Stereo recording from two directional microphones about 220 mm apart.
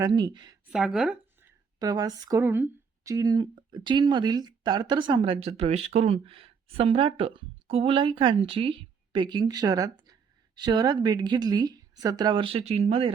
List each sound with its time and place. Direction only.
0.0 s speech: 20° right (ahead or behind)
0.7 s speech: centre (ahead or behind)
1.8 s speech: 15° right (ahead or behind)